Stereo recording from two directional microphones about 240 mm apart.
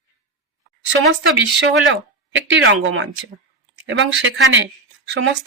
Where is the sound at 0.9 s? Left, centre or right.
Right.